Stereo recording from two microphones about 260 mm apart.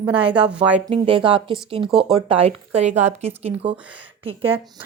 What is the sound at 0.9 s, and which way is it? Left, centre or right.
A woman's voice, centre.